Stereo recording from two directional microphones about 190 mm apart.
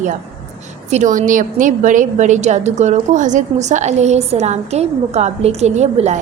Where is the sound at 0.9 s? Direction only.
40° right (ahead or behind).